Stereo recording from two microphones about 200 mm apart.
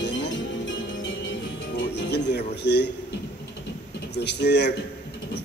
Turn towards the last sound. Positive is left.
turn(degrees=55)  # may be behind; listen again after turning